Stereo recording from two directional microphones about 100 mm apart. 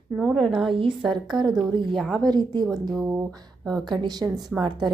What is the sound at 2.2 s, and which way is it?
Speech, 45° right (ahead or behind).